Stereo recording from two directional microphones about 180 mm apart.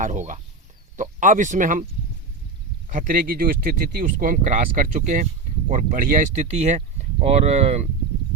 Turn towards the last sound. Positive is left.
turn(degrees=-40)  # may be behind; listen again after turning